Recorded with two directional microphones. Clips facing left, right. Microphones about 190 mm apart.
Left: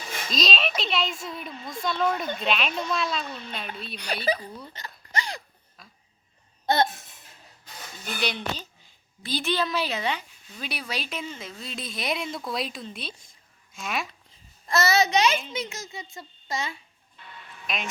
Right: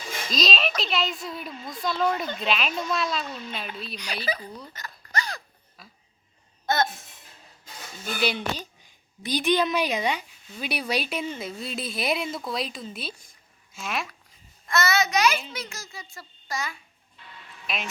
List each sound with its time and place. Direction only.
0.3 s a child's voice: centre (ahead or behind)
3.9 s speech: 55° left (ahead or behind)
5.1 s a sound: 25° left (ahead or behind)
5.8 s a sound: 5° right (ahead or behind)
8.2 s a woman's voice: 10° right (ahead or behind)
14.7 s a child's voice: 35° left (ahead or behind)
17.2 s music: 50° left (ahead or behind)